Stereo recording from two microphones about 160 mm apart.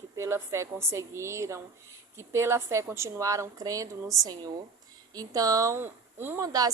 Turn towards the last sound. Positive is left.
turn(degrees=-25)  # may be behind; listen again after turning